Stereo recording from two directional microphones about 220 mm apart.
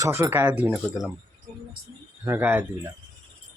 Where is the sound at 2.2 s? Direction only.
10° right (ahead or behind).